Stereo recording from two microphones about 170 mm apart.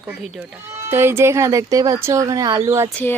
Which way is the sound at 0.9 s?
15° right (ahead or behind).